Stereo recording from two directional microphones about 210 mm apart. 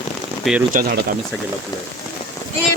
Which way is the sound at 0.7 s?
45° right (ahead or behind).